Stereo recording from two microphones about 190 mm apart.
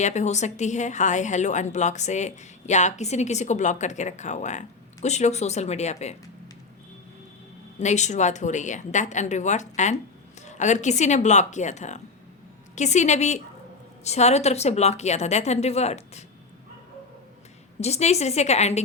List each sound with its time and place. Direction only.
0.0 s a woman's voice: 40° left (ahead or behind)
7.8 s a woman's voice: 40° left (ahead or behind)
17.7 s a woman's voice: 35° left (ahead or behind)